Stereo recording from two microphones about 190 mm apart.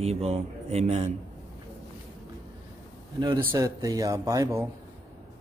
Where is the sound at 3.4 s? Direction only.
15° right (ahead or behind).